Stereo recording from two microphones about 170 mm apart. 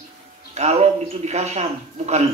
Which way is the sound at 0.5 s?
40° right (ahead or behind).